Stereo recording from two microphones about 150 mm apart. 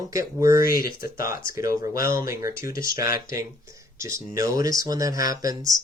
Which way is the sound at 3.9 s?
20° right (ahead or behind).